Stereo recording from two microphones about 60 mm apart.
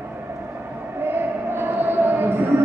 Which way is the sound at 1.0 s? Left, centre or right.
Right.